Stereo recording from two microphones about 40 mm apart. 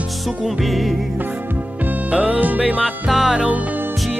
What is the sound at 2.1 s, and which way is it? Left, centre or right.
Music, right.